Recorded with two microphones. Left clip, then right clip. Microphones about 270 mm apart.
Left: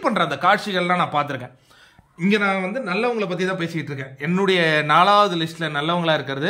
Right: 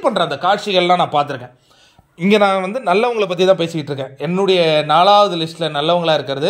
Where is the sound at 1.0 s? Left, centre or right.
Left.